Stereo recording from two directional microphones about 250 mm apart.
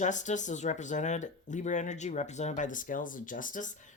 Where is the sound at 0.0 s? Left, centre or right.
Left.